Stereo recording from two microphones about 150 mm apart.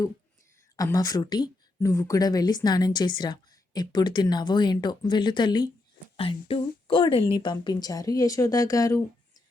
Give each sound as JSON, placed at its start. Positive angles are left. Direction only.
{"t": 0.8, "sound": "a woman's voice", "side_deg": 25}